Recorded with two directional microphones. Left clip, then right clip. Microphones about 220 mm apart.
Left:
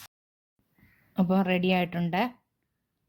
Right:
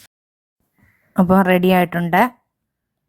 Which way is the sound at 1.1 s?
30° right (ahead or behind).